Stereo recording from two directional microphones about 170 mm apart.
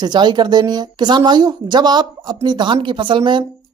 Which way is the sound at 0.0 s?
25° right (ahead or behind).